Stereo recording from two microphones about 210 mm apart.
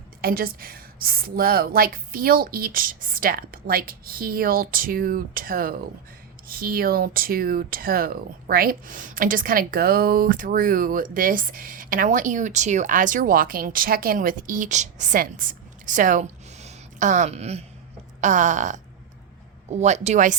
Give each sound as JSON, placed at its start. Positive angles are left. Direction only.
{"t": 0.2, "sound": "a woman's voice", "side_deg": -45}